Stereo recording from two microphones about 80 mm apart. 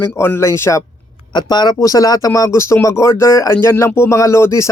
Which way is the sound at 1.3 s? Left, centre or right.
Left.